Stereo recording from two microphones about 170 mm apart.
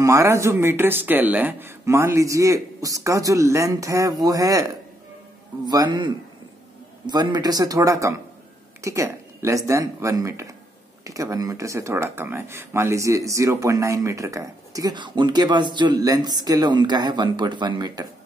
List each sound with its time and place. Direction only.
0.0 s speech: 15° right (ahead or behind)